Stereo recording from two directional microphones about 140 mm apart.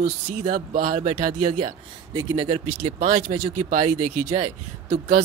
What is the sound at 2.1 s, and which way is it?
Speech, 35° right (ahead or behind).